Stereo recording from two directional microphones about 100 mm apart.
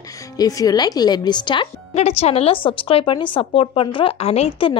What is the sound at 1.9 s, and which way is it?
A woman's voice, 85° left.